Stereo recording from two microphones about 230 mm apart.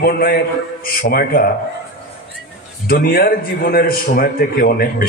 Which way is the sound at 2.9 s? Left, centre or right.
Left.